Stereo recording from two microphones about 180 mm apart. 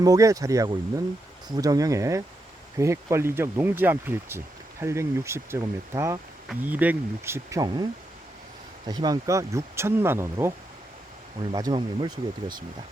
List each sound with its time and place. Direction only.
0.0 s speech: 20° right (ahead or behind)
8.9 s speech: 20° right (ahead or behind)
11.5 s speech: 20° right (ahead or behind)